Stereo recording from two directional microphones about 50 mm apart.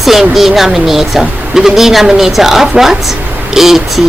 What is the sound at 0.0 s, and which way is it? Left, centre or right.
Speech, centre.